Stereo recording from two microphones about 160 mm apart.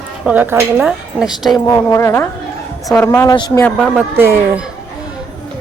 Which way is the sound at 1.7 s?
15° left (ahead or behind).